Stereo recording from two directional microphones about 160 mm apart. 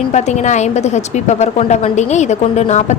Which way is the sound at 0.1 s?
45° left (ahead or behind).